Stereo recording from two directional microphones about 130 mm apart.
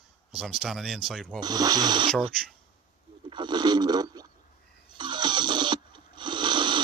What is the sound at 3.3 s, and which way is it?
Speech, 35° right (ahead or behind).